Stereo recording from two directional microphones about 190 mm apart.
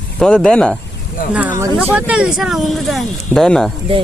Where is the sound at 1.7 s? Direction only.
5° right (ahead or behind).